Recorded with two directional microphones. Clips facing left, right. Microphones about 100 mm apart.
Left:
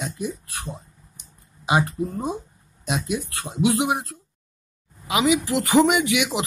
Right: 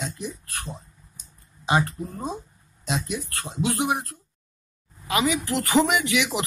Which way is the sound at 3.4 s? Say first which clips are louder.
Left 4 dB; 15° left (ahead or behind).